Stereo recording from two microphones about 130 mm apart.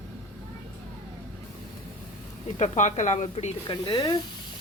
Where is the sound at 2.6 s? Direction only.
70° left (ahead or behind).